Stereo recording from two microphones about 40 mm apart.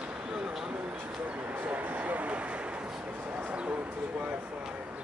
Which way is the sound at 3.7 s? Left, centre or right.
Right.